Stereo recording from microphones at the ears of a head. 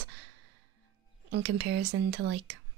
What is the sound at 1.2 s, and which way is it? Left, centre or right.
Speech, right.